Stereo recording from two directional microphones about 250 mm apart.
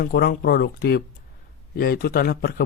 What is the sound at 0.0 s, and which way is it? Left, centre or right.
Speech, left.